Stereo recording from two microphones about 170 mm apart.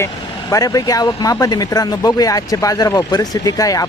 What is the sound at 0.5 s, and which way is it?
Speech, 20° left (ahead or behind).